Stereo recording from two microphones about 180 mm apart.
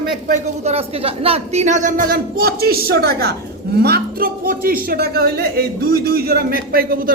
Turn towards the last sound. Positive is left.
turn(degrees=-55)  # may be behind; listen again after turning